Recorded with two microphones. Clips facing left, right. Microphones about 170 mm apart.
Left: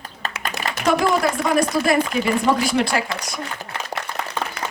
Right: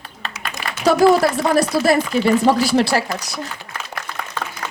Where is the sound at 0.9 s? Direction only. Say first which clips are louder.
Right 5 dB; 35° right (ahead or behind).